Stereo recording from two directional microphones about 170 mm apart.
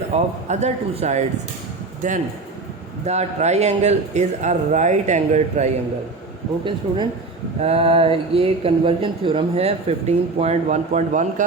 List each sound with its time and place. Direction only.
0.1 s speech: 40° right (ahead or behind)
6.7 s speech: 30° right (ahead or behind); by 11.4 s 45° right (ahead or behind)